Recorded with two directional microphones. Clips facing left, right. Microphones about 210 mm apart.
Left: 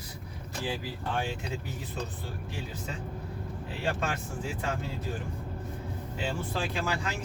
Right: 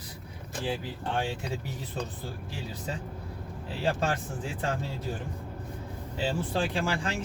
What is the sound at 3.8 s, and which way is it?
Speech, 35° right (ahead or behind).